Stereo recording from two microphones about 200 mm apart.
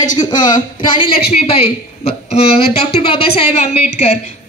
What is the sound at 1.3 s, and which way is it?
A woman's voice, 30° left (ahead or behind).